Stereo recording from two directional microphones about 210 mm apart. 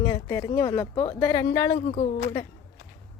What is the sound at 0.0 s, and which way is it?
Speech, 20° left (ahead or behind).